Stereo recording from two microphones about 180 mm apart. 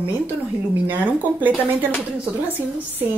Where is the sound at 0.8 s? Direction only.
10° right (ahead or behind).